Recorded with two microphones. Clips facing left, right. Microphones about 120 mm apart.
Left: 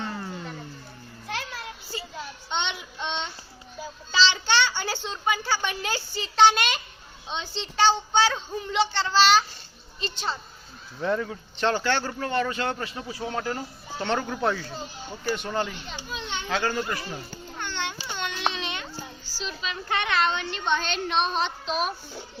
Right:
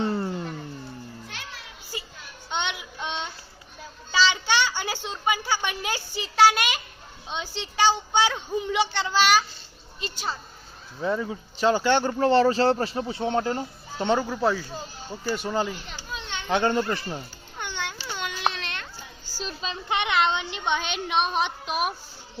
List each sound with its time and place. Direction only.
0.0 s a sound: 35° right (ahead or behind)
1.3 s music: 60° left (ahead or behind)
2.5 s child singing: 5° right (ahead or behind)
4.1 s a sound: 10° right (ahead or behind)
7.3 s a woman's voice: 10° right (ahead or behind)
12.2 s speech: 30° right (ahead or behind)
14.1 s a woman's voice: 5° right (ahead or behind)
16.5 s speech: 25° right (ahead or behind)
17.6 s babbling: 10° right (ahead or behind)
18.1 s baby cry: 5° right (ahead or behind)
19.2 s child singing: 45° right (ahead or behind)
19.6 s a woman's voice: 20° right (ahead or behind)